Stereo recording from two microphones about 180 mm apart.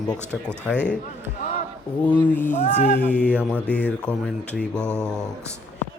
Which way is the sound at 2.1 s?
10° left (ahead or behind).